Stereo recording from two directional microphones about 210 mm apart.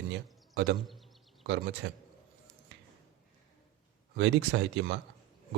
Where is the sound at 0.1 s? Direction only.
60° right (ahead or behind).